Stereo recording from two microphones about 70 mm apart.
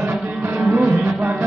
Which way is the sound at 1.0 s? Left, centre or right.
Right.